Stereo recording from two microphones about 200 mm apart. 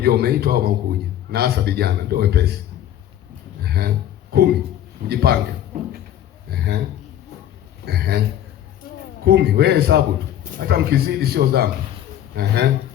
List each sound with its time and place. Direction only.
0.0 s a man's voice: 55° right (ahead or behind)
3.6 s a sound: 50° right (ahead or behind)
5.0 s a man's voice: 50° right (ahead or behind)
6.5 s a sound: 55° right (ahead or behind)
7.9 s a man's voice: 50° right (ahead or behind)
9.2 s a man's voice: 55° right (ahead or behind)